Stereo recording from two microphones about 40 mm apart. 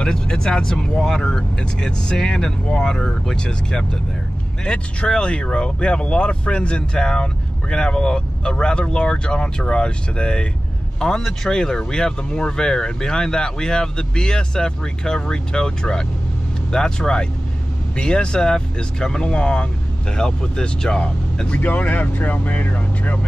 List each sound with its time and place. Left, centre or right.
0.0 s a man's voice: centre
21.5 s speech: left